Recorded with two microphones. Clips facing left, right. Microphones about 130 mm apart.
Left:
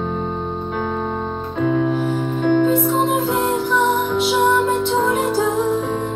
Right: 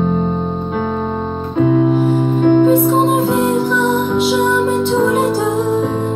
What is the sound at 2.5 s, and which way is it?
Music, 35° right (ahead or behind).